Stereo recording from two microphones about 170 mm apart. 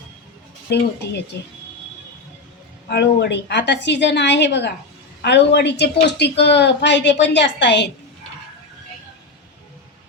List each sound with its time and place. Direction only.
2.9 s a woman's voice: 80° left